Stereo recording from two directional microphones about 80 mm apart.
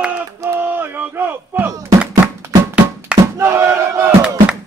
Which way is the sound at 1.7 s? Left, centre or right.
Right.